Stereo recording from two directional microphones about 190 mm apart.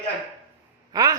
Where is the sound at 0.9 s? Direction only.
20° right (ahead or behind).